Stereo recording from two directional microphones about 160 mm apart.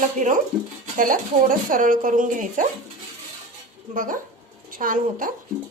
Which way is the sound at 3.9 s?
55° right (ahead or behind).